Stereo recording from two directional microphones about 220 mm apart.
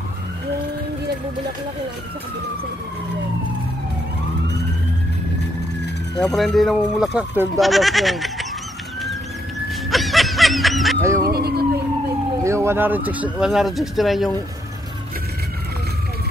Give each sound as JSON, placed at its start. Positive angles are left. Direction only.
{"t": 6.1, "sound": "speech", "side_deg": 0}
{"t": 9.8, "sound": "snicker", "side_deg": 0}
{"t": 11.0, "sound": "cat", "side_deg": -15}
{"t": 11.2, "sound": "police car", "side_deg": -45}
{"t": 12.4, "sound": "speech", "side_deg": -10}